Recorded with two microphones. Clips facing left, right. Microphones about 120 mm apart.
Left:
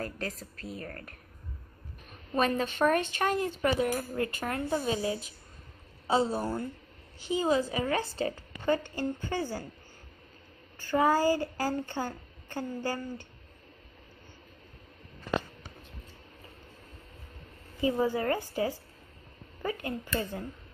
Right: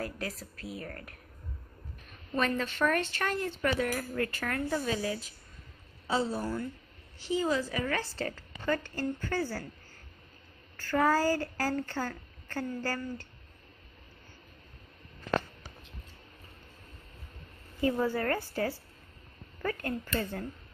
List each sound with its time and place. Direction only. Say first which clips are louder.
0.0 s a woman's voice: left 1 dB; 10° right (ahead or behind)
2.3 s speech: left 3 dB; 15° left (ahead or behind)
10.8 s a woman's voice: left 1 dB; 15° left (ahead or behind)
17.7 s a woman's voice: left 1 dB; 15° left (ahead or behind)